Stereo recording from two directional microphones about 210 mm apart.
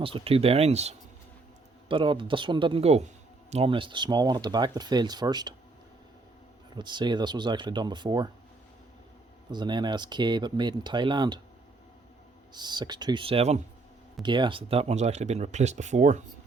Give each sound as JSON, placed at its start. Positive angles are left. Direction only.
{"t": 0.0, "sound": "speech", "side_deg": -25}
{"t": 6.7, "sound": "speech", "side_deg": -20}
{"t": 9.5, "sound": "speech", "side_deg": -20}
{"t": 12.5, "sound": "speech", "side_deg": -20}